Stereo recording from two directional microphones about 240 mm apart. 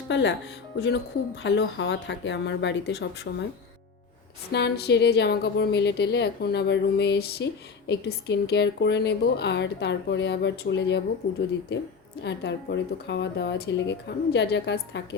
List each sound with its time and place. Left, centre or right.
0.1 s speech: left
4.5 s speech: left